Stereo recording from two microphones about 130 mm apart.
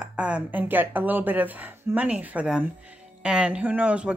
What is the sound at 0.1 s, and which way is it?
A woman's voice, 10° right (ahead or behind).